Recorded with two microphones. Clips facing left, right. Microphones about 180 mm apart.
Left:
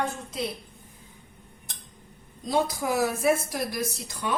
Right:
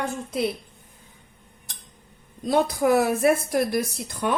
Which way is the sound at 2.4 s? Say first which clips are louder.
Right 5 dB; 60° right (ahead or behind).